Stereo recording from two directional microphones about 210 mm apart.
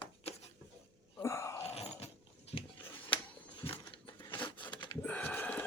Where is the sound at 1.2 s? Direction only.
15° left (ahead or behind).